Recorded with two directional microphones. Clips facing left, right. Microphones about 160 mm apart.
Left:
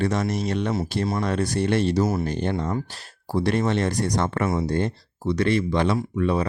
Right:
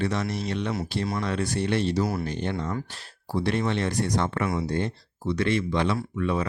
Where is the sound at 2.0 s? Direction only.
20° left (ahead or behind).